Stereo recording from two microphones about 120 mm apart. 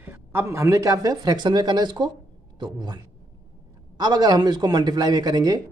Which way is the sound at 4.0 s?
35° right (ahead or behind).